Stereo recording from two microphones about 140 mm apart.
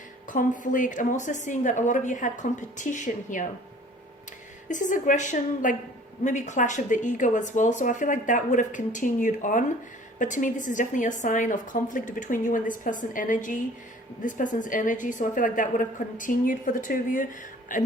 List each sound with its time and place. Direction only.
0.3 s speech: 65° left (ahead or behind)
4.7 s a woman's voice: 65° left (ahead or behind)